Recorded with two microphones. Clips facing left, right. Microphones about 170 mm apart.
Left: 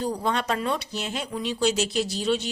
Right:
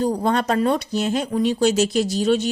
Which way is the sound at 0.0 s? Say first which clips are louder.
Right 6 dB; 45° right (ahead or behind).